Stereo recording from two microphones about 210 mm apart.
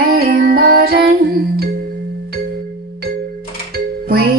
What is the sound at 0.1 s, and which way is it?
Music, 45° right (ahead or behind).